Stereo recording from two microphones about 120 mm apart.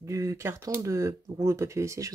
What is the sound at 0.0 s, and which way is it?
Speech, 25° right (ahead or behind).